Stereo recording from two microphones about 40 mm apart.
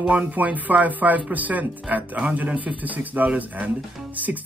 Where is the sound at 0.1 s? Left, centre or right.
Right.